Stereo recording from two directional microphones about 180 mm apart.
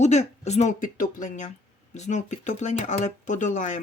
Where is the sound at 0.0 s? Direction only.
40° left (ahead or behind).